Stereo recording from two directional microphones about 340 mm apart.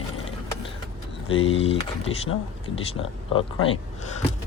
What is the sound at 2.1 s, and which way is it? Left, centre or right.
Speech, left.